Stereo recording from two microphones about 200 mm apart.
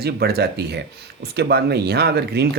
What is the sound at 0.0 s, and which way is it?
Speech, 50° right (ahead or behind).